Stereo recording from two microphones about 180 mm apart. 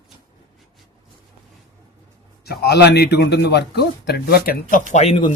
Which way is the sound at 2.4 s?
65° left (ahead or behind).